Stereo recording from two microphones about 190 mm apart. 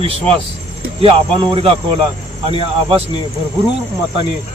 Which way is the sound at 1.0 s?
30° right (ahead or behind).